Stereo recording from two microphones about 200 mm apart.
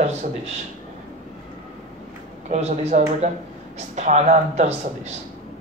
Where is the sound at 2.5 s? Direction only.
35° right (ahead or behind).